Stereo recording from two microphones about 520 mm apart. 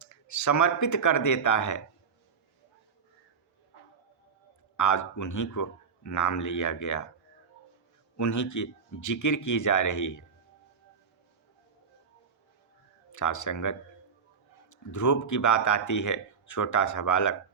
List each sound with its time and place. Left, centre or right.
0.0 s speech: left
4.8 s speech: left
8.1 s speech: left
13.1 s speech: left